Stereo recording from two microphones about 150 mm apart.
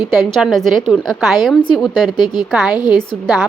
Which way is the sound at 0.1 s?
Centre (ahead or behind).